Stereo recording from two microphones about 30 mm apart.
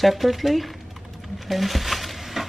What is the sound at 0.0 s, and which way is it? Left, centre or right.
Speech, centre.